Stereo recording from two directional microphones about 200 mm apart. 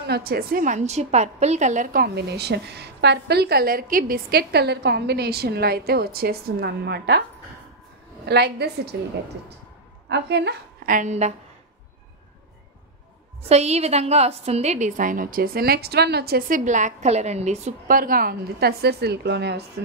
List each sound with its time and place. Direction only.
0.0 s a woman's voice: 50° right (ahead or behind)
8.3 s a woman's voice: 55° right (ahead or behind)
10.0 s a woman's voice: 55° right (ahead or behind)
11.0 s a woman's voice: 35° right (ahead or behind)
13.5 s a woman's voice: 30° right (ahead or behind); by 19.6 s 55° right (ahead or behind)